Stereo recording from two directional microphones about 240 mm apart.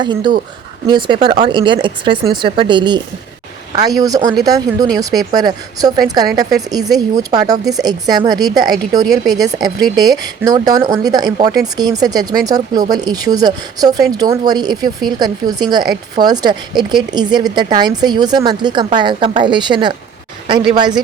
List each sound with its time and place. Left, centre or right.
0.0 s speech: centre